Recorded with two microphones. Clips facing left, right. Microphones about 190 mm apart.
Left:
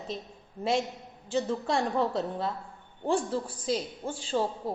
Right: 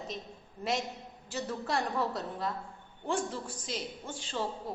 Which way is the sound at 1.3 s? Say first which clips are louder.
Left 6 dB; 25° left (ahead or behind).